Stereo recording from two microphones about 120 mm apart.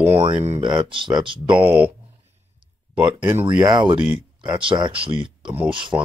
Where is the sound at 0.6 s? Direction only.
40° right (ahead or behind).